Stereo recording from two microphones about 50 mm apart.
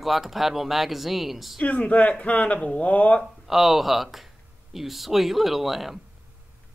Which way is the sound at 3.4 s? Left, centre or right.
Centre.